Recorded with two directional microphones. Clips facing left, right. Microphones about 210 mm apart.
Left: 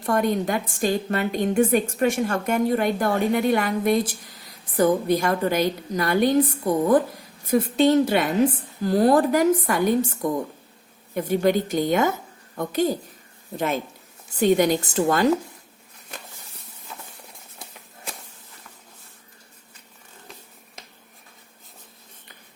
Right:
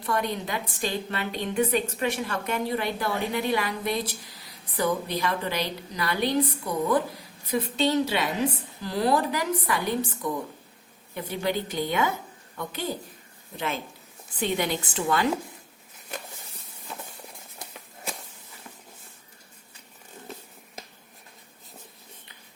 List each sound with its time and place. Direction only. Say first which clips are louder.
0.0 s a woman's voice: left 7 dB; 45° left (ahead or behind)
14.3 s a woman's voice: left 9 dB; 45° left (ahead or behind)